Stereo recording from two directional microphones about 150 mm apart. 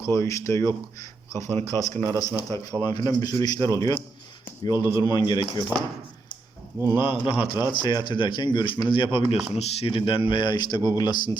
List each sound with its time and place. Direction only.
0.0 s speech: 20° left (ahead or behind)
6.7 s speech: 15° right (ahead or behind)
7.0 s speech: 35° left (ahead or behind)